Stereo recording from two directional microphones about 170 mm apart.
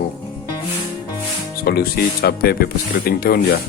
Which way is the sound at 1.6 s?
65° left (ahead or behind).